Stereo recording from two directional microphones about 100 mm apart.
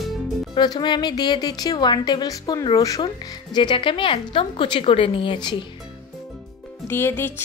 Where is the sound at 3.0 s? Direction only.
50° left (ahead or behind).